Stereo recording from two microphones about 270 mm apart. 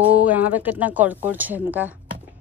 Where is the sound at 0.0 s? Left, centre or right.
Centre.